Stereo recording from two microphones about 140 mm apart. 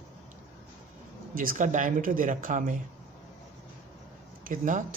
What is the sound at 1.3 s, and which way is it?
Speech, 80° right.